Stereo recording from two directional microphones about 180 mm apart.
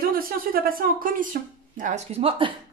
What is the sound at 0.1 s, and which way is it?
Speech, 55° right (ahead or behind).